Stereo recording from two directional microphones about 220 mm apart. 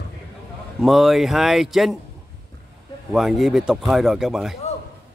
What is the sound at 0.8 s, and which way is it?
Speech, centre (ahead or behind).